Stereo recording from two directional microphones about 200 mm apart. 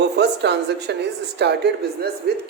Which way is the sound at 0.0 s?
55° right (ahead or behind).